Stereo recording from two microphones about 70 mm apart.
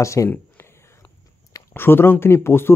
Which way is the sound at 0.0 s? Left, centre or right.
Left.